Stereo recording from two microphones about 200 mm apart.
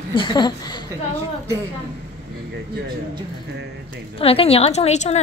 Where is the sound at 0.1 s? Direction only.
25° left (ahead or behind).